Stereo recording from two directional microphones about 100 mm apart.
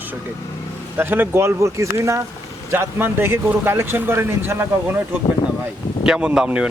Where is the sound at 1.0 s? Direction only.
20° right (ahead or behind).